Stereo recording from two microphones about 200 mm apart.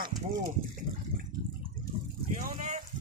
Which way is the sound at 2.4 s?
40° right (ahead or behind).